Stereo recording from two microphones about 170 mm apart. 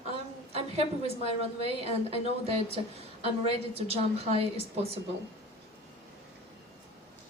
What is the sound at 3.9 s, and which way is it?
A woman's voice, 35° right (ahead or behind).